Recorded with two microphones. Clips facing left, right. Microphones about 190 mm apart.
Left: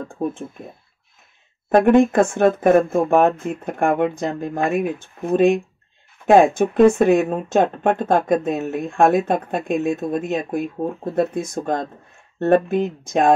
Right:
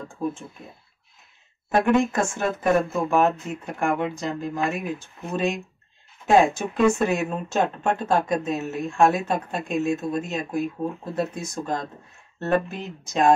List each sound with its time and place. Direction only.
0.1 s speech: 55° left (ahead or behind)
1.7 s speech: 55° left (ahead or behind)